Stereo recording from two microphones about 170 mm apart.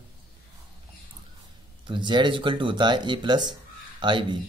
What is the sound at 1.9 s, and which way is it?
Speech, 25° right (ahead or behind).